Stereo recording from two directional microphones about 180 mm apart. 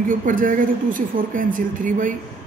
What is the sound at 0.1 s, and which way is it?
Speech, 50° right (ahead or behind).